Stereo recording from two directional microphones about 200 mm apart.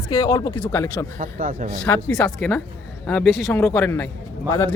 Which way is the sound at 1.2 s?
45° right (ahead or behind).